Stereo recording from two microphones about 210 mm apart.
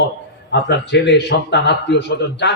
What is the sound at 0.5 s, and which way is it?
A man's voice, 55° left (ahead or behind).